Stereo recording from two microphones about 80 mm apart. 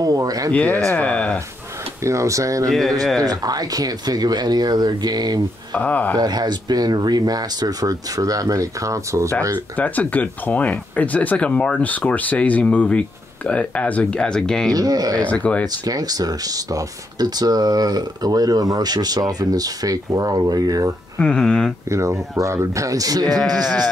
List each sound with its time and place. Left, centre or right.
0.0 s speech: right
0.5 s speech: centre
2.0 s speech: right
3.0 s speech: centre
3.3 s speech: right
5.7 s speech: centre
6.1 s speech: right
9.8 s speech: left
14.7 s speech: right
15.2 s speech: centre
15.8 s speech: right
21.2 s speech: centre
21.9 s speech: right